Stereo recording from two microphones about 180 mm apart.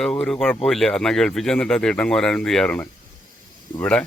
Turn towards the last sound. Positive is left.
turn(degrees=5)  # may be behind; listen again after turning